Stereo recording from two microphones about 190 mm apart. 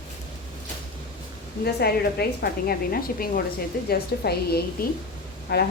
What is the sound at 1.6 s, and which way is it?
A woman's voice, 55° left (ahead or behind).